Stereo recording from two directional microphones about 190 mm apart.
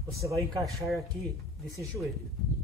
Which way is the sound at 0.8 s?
Centre (ahead or behind).